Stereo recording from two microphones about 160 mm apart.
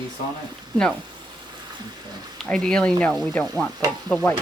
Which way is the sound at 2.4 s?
5° left (ahead or behind).